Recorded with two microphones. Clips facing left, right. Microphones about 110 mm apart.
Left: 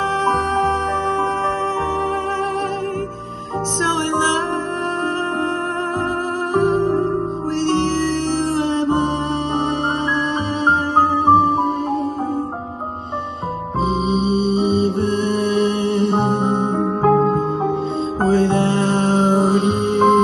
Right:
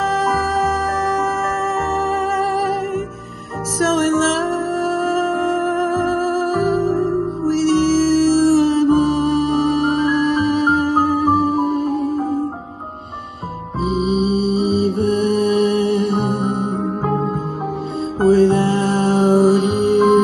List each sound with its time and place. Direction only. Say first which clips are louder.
3.8 s music: right 5 dB; 25° left (ahead or behind)
6.5 s music: left 5 dB; 30° left (ahead or behind)
13.8 s music: right 2 dB; 30° left (ahead or behind)
16.8 s music: left 5 dB; 45° left (ahead or behind)
18.2 s music: right 4 dB; 30° left (ahead or behind)